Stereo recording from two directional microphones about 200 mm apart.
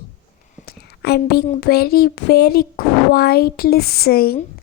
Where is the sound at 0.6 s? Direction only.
50° left (ahead or behind).